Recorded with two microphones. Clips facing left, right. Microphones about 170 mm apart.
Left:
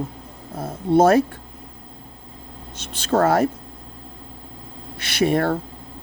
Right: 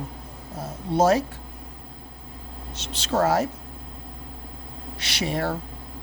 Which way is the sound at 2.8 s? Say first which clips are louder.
Left 4 dB; 50° left (ahead or behind).